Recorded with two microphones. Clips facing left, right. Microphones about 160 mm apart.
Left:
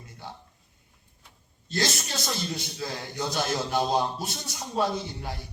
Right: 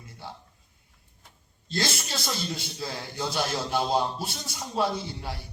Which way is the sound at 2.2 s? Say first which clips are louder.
Left 1 dB; 15° left (ahead or behind).